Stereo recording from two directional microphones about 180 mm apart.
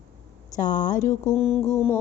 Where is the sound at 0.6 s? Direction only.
45° left (ahead or behind).